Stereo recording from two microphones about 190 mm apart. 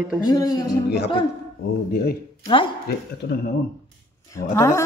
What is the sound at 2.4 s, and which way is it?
Speech, 25° left (ahead or behind).